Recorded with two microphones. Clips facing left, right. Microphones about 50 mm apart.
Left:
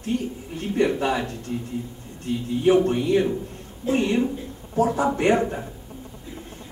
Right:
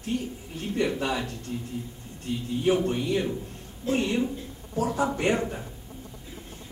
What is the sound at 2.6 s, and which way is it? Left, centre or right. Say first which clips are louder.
A man's voice: left 6 dB; left.